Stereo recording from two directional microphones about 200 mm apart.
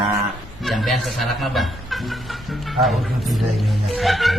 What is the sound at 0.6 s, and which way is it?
Speech, centre (ahead or behind).